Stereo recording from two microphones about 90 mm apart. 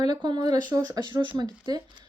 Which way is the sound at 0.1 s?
50° right (ahead or behind).